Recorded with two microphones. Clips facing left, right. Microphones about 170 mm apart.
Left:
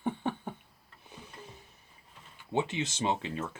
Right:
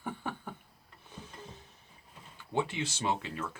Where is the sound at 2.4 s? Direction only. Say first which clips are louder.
Left 2 dB; 20° left (ahead or behind).